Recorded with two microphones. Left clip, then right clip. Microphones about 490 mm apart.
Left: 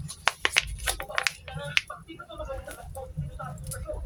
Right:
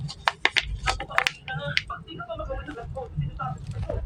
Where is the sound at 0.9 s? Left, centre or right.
Left.